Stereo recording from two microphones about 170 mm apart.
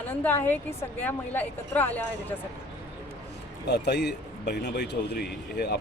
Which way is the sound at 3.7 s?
75° left (ahead or behind).